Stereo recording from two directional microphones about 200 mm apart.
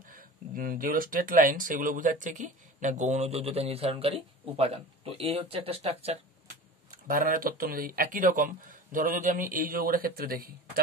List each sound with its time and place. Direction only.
0.1 s speech: 45° right (ahead or behind)